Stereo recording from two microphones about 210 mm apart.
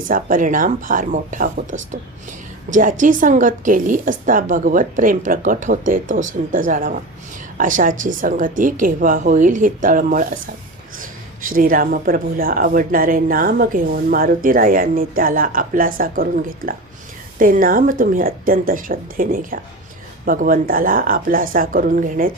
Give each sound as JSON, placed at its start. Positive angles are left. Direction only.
{"t": 0.1, "sound": "speech", "side_deg": -40}
{"t": 2.6, "sound": "speech", "side_deg": -40}